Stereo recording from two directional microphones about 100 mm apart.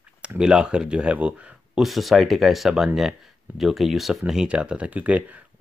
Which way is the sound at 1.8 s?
Centre (ahead or behind).